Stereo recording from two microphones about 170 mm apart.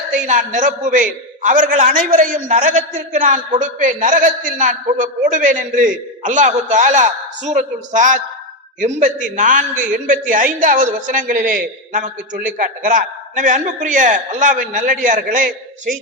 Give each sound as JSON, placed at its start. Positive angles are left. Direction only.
{"t": 0.1, "sound": "a man's voice", "side_deg": -50}